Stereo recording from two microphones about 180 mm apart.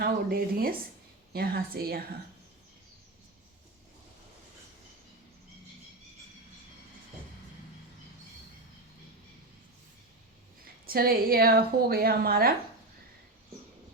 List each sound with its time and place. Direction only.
0.0 s a woman's voice: 55° right (ahead or behind)
10.8 s a woman's voice: 55° right (ahead or behind)